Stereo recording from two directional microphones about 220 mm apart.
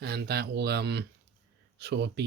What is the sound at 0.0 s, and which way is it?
Speech, 45° right (ahead or behind).